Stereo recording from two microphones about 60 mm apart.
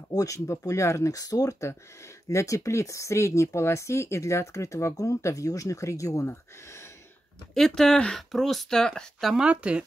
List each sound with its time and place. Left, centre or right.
0.1 s speech: left
0.5 s speech: left
7.5 s speech: centre
9.4 s speech: centre